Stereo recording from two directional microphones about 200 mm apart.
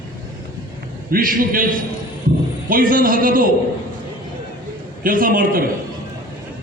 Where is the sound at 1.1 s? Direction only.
45° right (ahead or behind).